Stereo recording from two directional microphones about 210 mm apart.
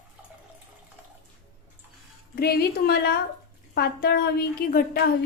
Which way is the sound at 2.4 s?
45° left (ahead or behind).